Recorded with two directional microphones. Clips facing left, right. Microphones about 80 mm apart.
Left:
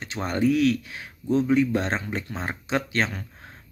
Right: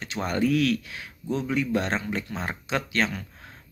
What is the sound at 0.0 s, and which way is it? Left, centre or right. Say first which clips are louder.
Speech: left 2 dB; left.